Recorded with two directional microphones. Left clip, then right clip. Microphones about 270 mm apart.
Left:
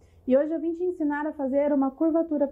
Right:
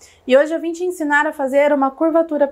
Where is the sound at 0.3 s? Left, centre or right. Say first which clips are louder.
Right 9 dB; centre.